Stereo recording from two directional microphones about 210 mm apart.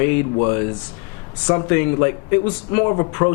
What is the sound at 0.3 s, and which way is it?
Speech, 20° left (ahead or behind).